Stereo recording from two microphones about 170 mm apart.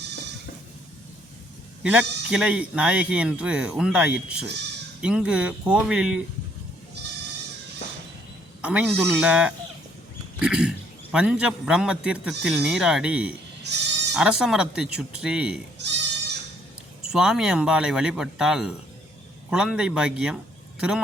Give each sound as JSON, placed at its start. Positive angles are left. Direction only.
{"t": 1.8, "sound": "a man's voice", "side_deg": -5}
{"t": 8.6, "sound": "a man's voice", "side_deg": -5}
{"t": 13.7, "sound": "bleat", "side_deg": -80}
{"t": 14.1, "sound": "a man's voice", "side_deg": -5}
{"t": 15.8, "sound": "goat", "side_deg": -90}
{"t": 17.0, "sound": "a man's voice", "side_deg": -5}